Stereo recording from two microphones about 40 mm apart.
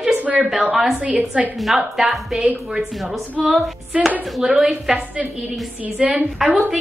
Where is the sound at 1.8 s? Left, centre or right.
Centre.